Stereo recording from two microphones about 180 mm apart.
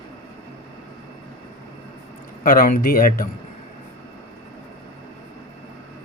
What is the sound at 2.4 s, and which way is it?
Speech, 50° left (ahead or behind).